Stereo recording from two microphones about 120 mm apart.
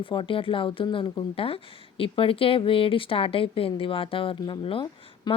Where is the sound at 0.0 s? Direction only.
45° left (ahead or behind).